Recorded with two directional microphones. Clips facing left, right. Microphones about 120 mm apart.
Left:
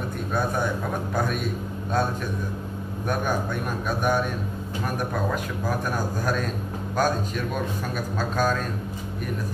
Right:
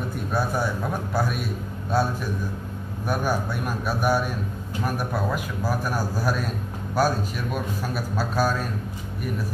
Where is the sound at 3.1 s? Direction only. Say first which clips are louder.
Right 1 dB; 5° right (ahead or behind).